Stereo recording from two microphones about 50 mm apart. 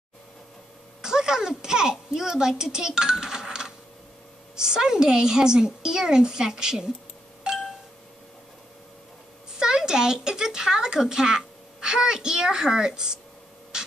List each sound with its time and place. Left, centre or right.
1.0 s a child's voice: centre
7.5 s a sound: centre
9.6 s speech: centre